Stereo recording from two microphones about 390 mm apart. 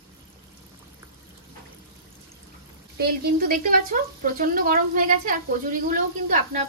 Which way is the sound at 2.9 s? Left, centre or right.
Right.